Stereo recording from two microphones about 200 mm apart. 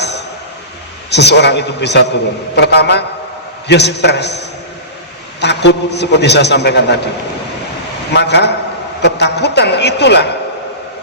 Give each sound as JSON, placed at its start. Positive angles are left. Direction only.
{"t": 1.1, "sound": "a man's voice", "side_deg": 55}
{"t": 8.1, "sound": "a man's voice", "side_deg": 60}